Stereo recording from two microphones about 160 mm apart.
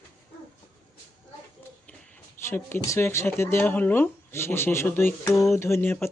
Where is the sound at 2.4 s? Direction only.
15° left (ahead or behind).